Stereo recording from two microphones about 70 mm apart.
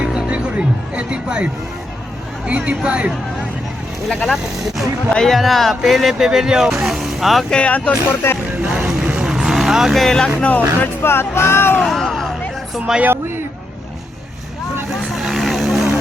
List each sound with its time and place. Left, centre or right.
0.0 s speech: centre
2.5 s speech: centre
4.1 s speech: centre
7.5 s speech: centre
8.7 s vehicle: centre
10.8 s speech: left
11.8 s a sound: centre
13.0 s speech: right
15.1 s vehicle: centre